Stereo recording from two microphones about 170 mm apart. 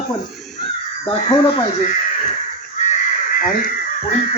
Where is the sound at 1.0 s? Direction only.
25° left (ahead or behind).